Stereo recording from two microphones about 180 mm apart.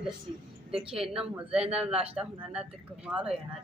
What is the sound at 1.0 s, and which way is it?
A woman's voice, 5° right (ahead or behind).